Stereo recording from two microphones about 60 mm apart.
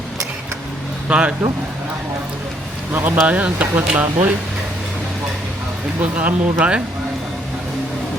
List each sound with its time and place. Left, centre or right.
1.0 s speech: centre
2.9 s speech: right
6.0 s speech: right